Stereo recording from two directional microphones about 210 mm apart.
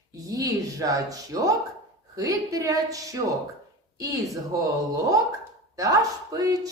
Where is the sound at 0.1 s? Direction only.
15° right (ahead or behind).